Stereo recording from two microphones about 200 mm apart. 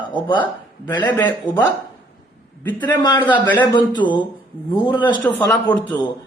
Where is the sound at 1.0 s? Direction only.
10° left (ahead or behind).